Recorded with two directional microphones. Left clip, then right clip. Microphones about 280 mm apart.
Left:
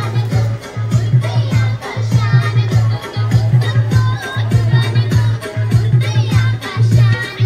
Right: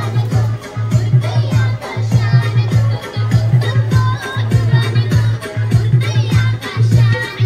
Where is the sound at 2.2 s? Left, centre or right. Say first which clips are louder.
Left 1 dB; centre.